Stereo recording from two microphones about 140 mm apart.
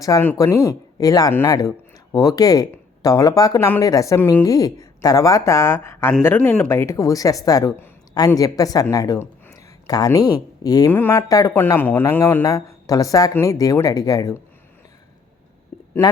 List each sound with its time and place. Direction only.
0.0 s speech: 25° left (ahead or behind)
10.9 s speech: 15° left (ahead or behind)
16.0 s speech: 15° left (ahead or behind)